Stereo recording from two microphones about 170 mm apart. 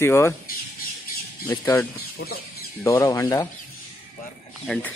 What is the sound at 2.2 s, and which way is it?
Speech, 90° left.